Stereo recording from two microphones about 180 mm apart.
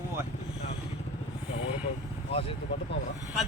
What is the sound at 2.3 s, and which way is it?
Speech, 30° left (ahead or behind).